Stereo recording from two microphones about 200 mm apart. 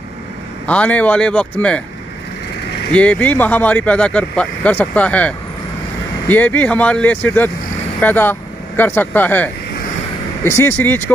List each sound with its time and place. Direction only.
0.7 s speech: 5° left (ahead or behind)
2.9 s speech: 5° left (ahead or behind)